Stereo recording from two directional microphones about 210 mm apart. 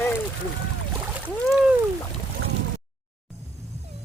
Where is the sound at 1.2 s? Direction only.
5° right (ahead or behind).